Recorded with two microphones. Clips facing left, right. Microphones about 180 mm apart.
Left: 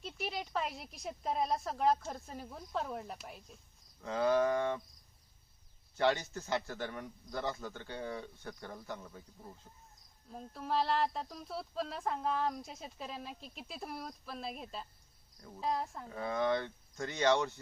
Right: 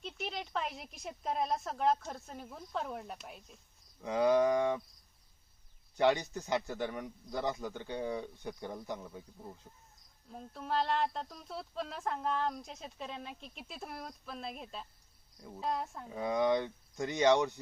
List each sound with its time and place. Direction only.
0.0 s speech: 5° left (ahead or behind)
4.0 s speech: 15° right (ahead or behind)
5.9 s speech: 15° right (ahead or behind)
10.3 s speech: centre (ahead or behind)
15.4 s speech: 10° right (ahead or behind)
15.6 s speech: centre (ahead or behind)
16.0 s speech: 15° right (ahead or behind)